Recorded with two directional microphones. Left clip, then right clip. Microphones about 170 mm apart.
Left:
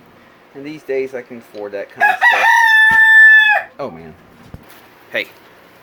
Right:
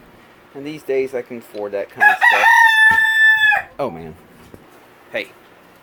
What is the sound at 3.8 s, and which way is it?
Speech, 40° right (ahead or behind).